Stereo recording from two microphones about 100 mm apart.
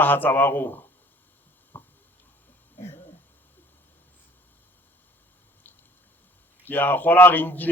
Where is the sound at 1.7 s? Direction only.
20° left (ahead or behind).